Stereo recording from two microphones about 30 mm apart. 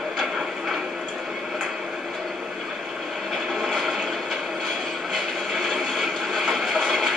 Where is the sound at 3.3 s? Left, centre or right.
Centre.